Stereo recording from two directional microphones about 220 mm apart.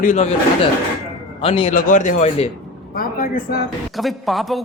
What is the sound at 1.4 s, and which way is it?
Speech, 25° left (ahead or behind).